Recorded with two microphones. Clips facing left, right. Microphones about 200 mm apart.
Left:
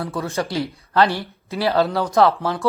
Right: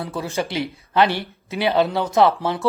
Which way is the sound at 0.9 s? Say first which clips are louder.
Even; 25° right (ahead or behind).